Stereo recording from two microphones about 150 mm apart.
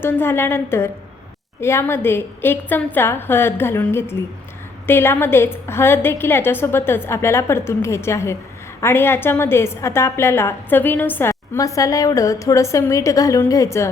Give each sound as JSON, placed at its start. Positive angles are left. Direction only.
{"t": 0.0, "sound": "a woman's voice", "side_deg": 15}